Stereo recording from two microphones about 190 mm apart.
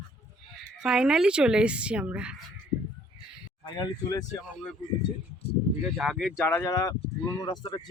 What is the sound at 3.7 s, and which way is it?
Speech, 20° left (ahead or behind).